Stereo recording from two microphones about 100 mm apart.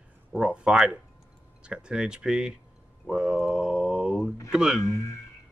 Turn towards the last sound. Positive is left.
turn(degrees=30)  # may be behind; listen again after turning